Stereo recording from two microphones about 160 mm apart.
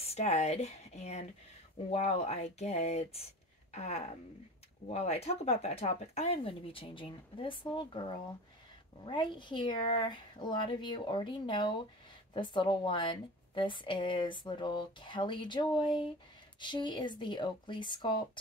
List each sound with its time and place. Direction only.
0.0 s a woman's voice: 40° left (ahead or behind)